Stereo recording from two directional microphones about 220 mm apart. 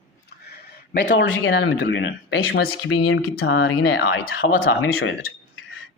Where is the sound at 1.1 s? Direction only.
55° left (ahead or behind).